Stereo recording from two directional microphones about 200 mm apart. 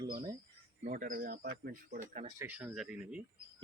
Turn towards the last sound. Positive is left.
turn(degrees=-5)  # may be behind; listen again after turning